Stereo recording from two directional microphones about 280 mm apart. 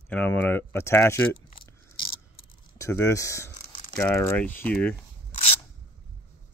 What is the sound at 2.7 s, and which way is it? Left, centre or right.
Speech, centre.